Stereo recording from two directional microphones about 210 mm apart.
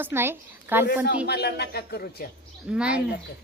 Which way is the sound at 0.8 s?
50° left (ahead or behind).